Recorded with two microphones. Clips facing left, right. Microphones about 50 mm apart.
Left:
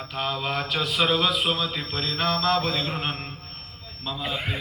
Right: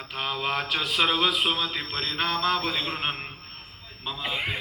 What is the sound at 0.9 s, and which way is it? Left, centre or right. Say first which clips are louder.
Speech: left 1 dB; centre.